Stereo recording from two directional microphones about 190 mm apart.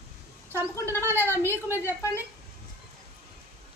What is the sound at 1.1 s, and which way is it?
Speech, 10° left (ahead or behind).